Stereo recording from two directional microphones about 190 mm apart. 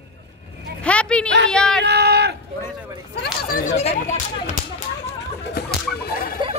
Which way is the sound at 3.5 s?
35° left (ahead or behind).